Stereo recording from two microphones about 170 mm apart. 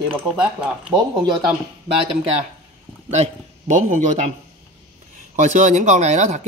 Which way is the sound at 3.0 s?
40° right (ahead or behind).